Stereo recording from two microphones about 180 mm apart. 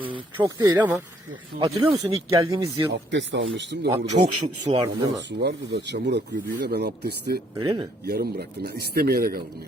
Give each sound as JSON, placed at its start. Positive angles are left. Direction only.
{"t": 0.3, "sound": "speech", "side_deg": -15}
{"t": 1.5, "sound": "speech", "side_deg": -25}
{"t": 3.1, "sound": "speech", "side_deg": -80}
{"t": 3.8, "sound": "speech", "side_deg": -40}
{"t": 5.4, "sound": "speech", "side_deg": -70}
{"t": 7.6, "sound": "speech", "side_deg": -20}
{"t": 8.0, "sound": "speech", "side_deg": -60}